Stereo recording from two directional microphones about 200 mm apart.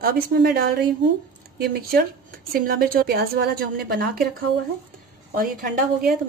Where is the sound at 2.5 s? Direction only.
50° right (ahead or behind).